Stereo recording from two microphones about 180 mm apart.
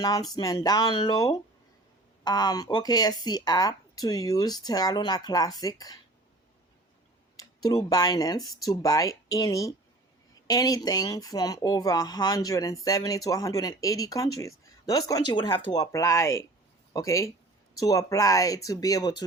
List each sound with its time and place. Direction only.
0.0 s speech: 20° left (ahead or behind)
7.3 s speech: 20° left (ahead or behind)